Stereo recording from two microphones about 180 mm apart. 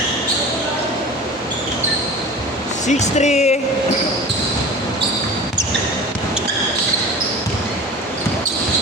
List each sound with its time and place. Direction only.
2.8 s speech: 40° left (ahead or behind)